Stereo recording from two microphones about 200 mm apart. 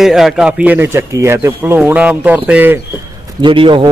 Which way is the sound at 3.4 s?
25° right (ahead or behind).